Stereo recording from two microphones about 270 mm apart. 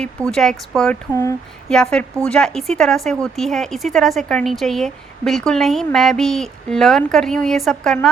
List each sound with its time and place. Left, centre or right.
0.3 s speech: centre